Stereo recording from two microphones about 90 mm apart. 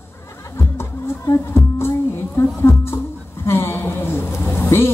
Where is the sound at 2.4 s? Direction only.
30° left (ahead or behind).